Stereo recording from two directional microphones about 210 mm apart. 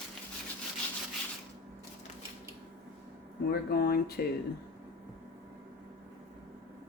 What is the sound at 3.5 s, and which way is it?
Speech, 45° left (ahead or behind).